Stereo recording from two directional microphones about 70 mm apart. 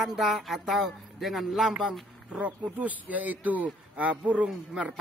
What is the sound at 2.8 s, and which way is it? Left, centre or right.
A man's voice, right.